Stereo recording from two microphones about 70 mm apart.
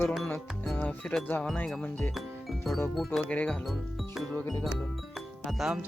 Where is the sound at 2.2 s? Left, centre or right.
Centre.